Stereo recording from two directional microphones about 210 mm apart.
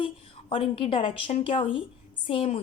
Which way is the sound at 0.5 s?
25° left (ahead or behind).